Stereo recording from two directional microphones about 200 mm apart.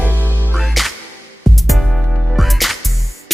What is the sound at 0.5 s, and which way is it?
Music, centre (ahead or behind).